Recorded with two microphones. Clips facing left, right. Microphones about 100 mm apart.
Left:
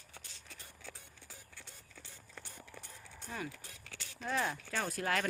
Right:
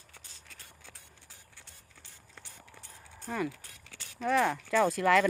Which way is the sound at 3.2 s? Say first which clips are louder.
Right 9 dB; 90° right.